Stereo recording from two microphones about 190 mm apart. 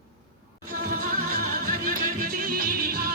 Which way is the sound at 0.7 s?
50° right (ahead or behind).